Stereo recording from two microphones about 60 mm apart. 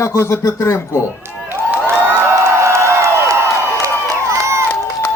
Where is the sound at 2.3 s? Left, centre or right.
Right.